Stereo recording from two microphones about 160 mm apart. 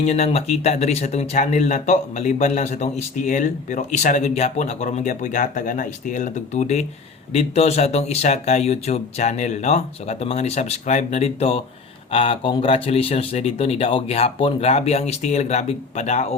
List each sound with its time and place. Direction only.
0.0 s speech: 40° left (ahead or behind)